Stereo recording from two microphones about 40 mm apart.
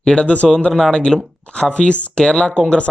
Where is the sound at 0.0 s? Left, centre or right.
Left.